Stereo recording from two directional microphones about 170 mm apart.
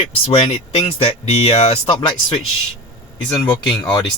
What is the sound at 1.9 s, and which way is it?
Speech, 30° left (ahead or behind).